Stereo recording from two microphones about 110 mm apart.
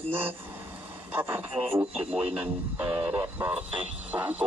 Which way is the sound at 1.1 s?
20° right (ahead or behind).